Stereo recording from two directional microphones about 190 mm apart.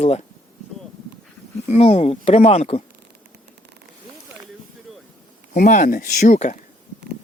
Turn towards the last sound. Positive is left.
turn(degrees=40)  # may be behind; listen again after turning